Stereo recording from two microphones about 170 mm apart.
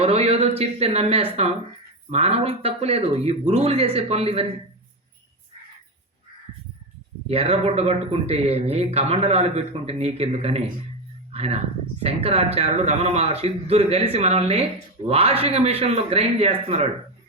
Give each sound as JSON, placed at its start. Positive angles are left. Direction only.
{"t": 0.0, "sound": "speech", "side_deg": -35}
{"t": 7.3, "sound": "speech", "side_deg": -35}